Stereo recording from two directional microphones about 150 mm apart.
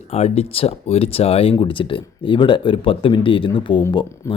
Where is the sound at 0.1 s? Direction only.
45° left (ahead or behind).